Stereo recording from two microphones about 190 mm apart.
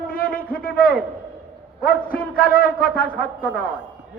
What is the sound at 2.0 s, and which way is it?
A man's voice, 50° left (ahead or behind).